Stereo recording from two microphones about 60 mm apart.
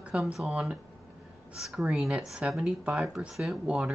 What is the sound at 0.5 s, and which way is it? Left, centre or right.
A woman's voice, centre.